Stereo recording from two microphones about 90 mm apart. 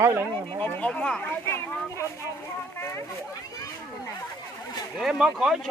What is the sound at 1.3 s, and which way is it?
Speech, 25° left (ahead or behind).